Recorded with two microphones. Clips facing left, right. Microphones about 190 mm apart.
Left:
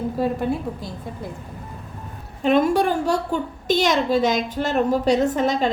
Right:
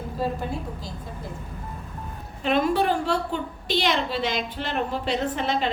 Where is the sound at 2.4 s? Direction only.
45° left (ahead or behind).